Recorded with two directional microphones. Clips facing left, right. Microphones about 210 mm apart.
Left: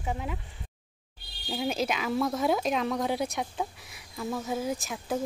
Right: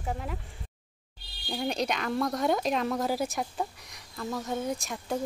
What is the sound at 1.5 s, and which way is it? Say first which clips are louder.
Speech: left 1 dB; 5° left (ahead or behind).